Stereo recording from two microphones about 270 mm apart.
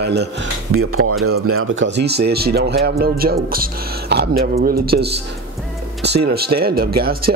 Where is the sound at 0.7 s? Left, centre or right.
Right.